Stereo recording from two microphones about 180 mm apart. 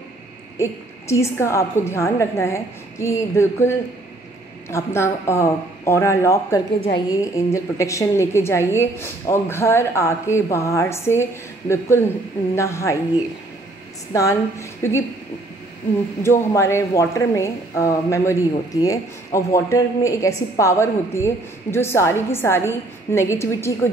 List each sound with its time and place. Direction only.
0.6 s speech: 15° left (ahead or behind)
14.1 s speech: 15° left (ahead or behind)
16.2 s speech: 15° left (ahead or behind)